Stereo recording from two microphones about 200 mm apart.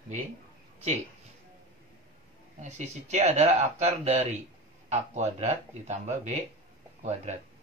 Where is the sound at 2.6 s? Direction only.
35° right (ahead or behind).